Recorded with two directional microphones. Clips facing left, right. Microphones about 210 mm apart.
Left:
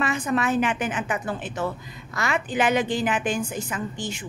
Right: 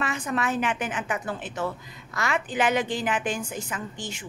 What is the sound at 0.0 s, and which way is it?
A woman's voice, 15° left (ahead or behind).